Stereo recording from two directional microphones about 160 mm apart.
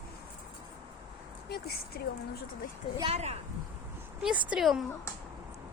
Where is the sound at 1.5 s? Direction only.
75° left (ahead or behind).